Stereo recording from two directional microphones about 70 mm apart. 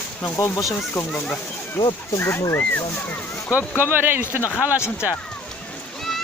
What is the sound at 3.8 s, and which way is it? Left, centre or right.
Speech, right.